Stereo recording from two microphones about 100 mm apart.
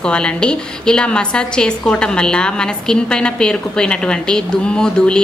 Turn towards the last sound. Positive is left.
turn(degrees=5)  # may be behind; listen again after turning